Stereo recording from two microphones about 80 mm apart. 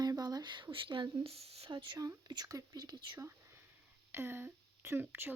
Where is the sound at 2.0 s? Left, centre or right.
Right.